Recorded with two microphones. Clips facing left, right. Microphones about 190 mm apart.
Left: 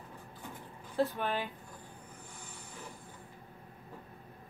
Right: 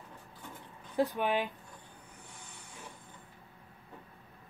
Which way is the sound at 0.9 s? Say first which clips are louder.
Right 2 dB; 15° right (ahead or behind).